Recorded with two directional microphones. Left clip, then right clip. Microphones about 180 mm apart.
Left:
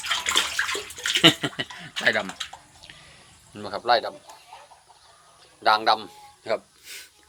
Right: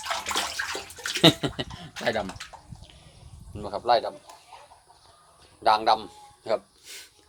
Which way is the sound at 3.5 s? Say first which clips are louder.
Left 1 dB; 10° right (ahead or behind).